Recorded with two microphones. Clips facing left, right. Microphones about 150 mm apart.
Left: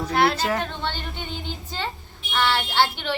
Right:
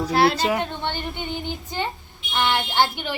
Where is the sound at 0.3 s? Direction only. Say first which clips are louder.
Right 2 dB; 15° right (ahead or behind).